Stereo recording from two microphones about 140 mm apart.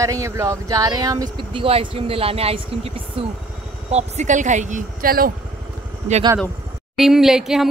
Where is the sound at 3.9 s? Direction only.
55° right (ahead or behind); by 5.3 s 90° right.